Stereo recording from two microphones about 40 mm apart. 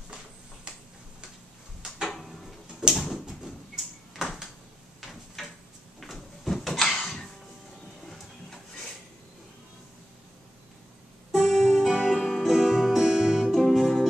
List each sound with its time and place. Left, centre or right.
0.7 s tick-tock: right
2.0 s a sound: centre
11.3 s music: centre
13.5 s music: centre